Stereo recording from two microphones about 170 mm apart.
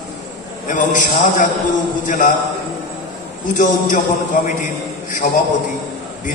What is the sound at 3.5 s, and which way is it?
Speech, 50° left (ahead or behind).